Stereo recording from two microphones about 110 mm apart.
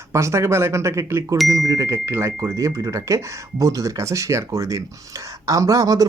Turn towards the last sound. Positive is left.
turn(degrees=-30)  # may be behind; listen again after turning